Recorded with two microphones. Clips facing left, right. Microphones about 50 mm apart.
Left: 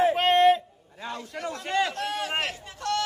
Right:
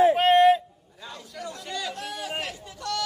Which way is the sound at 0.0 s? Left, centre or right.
Centre.